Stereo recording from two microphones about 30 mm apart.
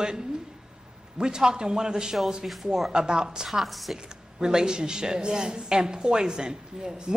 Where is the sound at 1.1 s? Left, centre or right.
Right.